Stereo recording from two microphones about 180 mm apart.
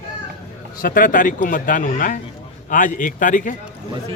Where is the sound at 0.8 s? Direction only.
50° left (ahead or behind).